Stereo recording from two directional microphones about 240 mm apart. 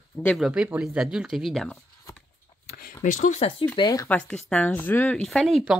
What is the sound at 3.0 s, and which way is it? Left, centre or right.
Speech, left.